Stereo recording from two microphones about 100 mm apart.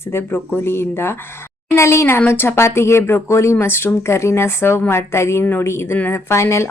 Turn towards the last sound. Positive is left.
turn(degrees=25)  # may be behind; listen again after turning